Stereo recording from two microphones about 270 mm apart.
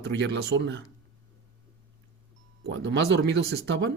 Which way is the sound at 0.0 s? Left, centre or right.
Right.